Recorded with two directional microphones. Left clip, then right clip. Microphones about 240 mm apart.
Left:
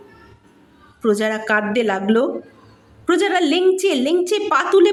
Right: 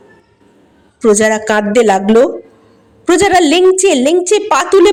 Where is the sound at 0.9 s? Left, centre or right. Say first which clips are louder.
Right 9 dB; right.